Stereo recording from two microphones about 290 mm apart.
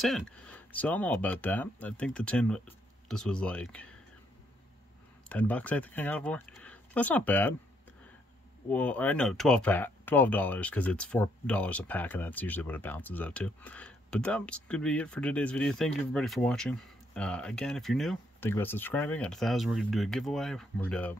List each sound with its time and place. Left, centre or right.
0.0 s speech: centre
5.3 s speech: centre
8.6 s speech: centre